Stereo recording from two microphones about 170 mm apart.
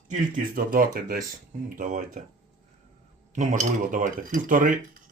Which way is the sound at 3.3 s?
50° right (ahead or behind).